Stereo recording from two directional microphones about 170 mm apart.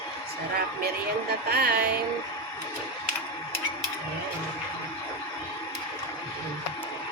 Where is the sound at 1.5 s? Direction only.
70° right (ahead or behind).